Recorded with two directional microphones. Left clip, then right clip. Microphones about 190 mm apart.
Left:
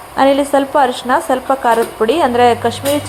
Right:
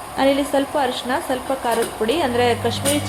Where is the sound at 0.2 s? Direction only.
20° left (ahead or behind).